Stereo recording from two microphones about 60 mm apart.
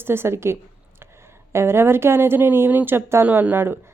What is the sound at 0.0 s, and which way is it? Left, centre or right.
Speech, right.